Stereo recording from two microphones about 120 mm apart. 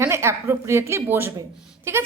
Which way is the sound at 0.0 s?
20° right (ahead or behind).